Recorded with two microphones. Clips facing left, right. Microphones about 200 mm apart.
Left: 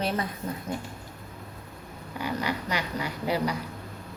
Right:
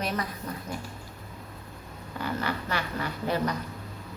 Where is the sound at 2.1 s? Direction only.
15° left (ahead or behind).